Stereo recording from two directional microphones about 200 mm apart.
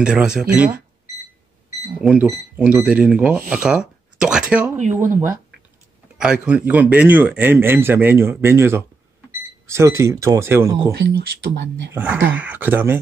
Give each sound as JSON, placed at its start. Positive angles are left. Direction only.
{"t": 0.0, "sound": "speech", "side_deg": -5}
{"t": 2.0, "sound": "speech", "side_deg": -5}
{"t": 6.1, "sound": "a man's voice", "side_deg": -5}
{"t": 11.0, "sound": "speech", "side_deg": -55}
{"t": 11.9, "sound": "a man's voice", "side_deg": -10}